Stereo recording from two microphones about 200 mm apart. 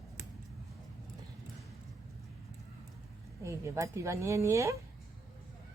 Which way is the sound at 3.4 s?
15° right (ahead or behind).